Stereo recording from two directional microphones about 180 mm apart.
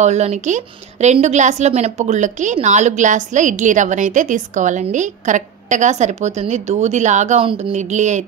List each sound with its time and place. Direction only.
0.0 s a woman's voice: 40° right (ahead or behind)